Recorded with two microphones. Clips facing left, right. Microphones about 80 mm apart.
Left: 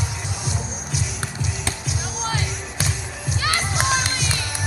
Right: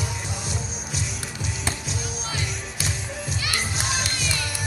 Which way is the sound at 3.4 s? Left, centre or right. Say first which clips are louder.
Left 8 dB; left.